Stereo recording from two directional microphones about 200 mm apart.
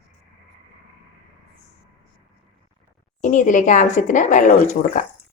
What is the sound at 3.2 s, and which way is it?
Speech, 40° left (ahead or behind).